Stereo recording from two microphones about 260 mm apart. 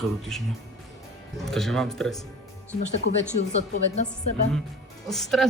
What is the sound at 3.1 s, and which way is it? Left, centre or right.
Speech, left.